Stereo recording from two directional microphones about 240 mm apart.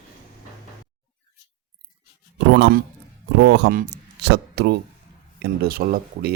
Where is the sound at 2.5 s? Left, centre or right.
Right.